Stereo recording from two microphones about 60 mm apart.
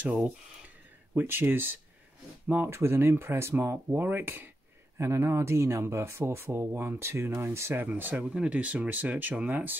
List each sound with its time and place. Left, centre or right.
1.1 s speech: right
3.9 s speech: right
4.9 s speech: right
7.9 s speech: right